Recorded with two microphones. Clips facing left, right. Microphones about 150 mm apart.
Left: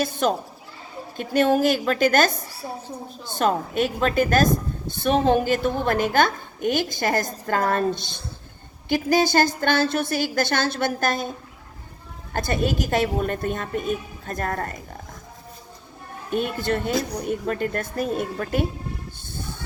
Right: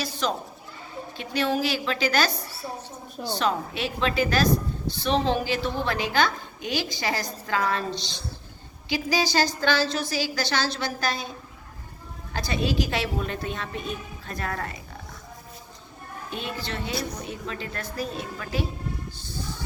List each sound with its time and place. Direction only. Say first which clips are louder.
0.0 s a woman's voice: left 6 dB; 50° left (ahead or behind)
12.3 s a woman's voice: left 3 dB; 50° left (ahead or behind)
16.3 s a woman's voice: left 10 dB; 50° left (ahead or behind)
19.2 s a sound: even; 55° left (ahead or behind)